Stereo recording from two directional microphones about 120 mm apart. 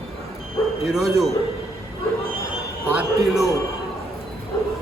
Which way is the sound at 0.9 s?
Centre (ahead or behind).